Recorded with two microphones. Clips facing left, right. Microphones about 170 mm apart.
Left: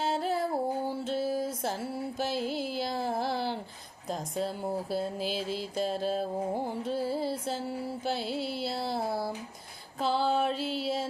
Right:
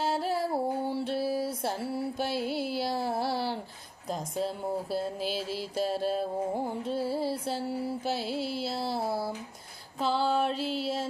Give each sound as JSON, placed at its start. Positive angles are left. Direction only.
{"t": 0.0, "sound": "music", "side_deg": 0}